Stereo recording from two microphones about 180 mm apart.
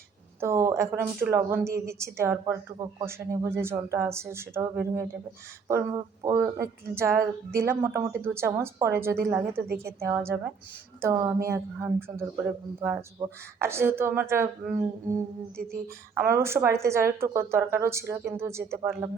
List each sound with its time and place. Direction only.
0.3 s a woman's voice: 15° right (ahead or behind)
16.2 s a woman's voice: 15° right (ahead or behind)